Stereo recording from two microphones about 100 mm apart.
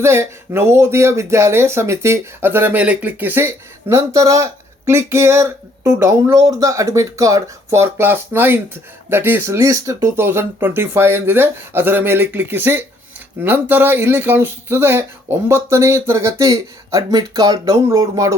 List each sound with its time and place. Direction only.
0.0 s speech: 25° right (ahead or behind)